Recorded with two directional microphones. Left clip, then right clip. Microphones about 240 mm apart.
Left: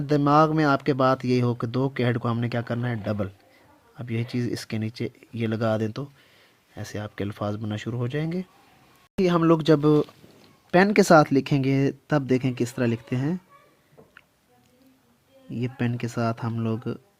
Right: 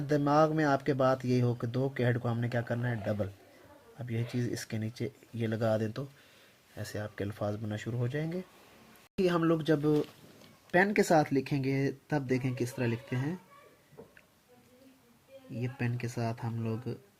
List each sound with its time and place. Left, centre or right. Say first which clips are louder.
0.1 s speech: left 7 dB; left
15.5 s speech: left 8 dB; left